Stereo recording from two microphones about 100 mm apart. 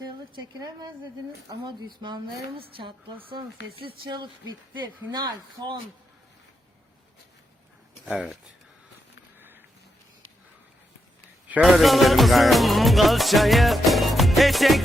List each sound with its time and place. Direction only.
0.3 s speech: 45° right (ahead or behind)
8.0 s speech: 15° right (ahead or behind)
9.4 s a sound: 20° right (ahead or behind)
11.6 s music: centre (ahead or behind)